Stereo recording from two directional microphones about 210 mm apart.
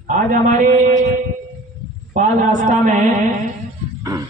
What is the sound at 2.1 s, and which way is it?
Speech, 35° right (ahead or behind).